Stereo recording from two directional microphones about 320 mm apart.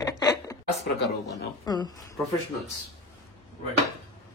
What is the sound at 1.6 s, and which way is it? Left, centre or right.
Speech, centre.